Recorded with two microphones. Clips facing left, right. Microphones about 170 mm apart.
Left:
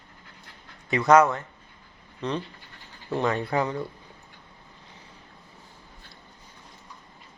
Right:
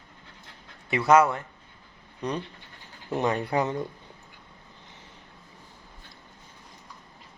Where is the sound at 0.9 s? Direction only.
10° right (ahead or behind).